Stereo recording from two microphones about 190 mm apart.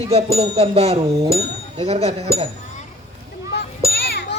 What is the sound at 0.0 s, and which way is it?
Music, 30° right (ahead or behind).